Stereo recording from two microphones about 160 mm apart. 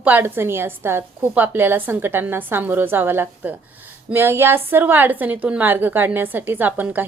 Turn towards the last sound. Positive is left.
turn(degrees=-10)  # may be behind; listen again after turning